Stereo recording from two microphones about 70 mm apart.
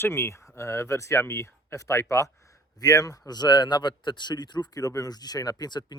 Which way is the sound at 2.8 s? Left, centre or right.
Left.